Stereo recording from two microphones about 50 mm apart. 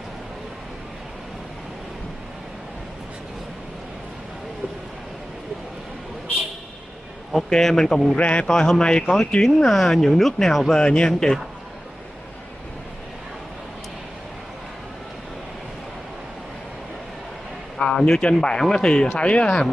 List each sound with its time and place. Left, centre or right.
7.4 s speech: centre
8.2 s speech: left
8.5 s speech: centre
10.8 s speech: centre
17.7 s a sound: left
18.4 s speech: centre